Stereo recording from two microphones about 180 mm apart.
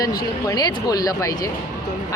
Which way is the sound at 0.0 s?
20° left (ahead or behind).